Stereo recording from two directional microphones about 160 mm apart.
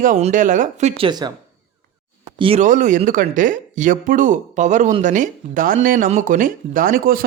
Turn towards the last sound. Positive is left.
turn(degrees=-65)  # may be behind; listen again after turning